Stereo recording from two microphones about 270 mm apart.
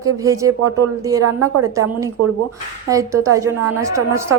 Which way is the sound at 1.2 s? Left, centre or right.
Right.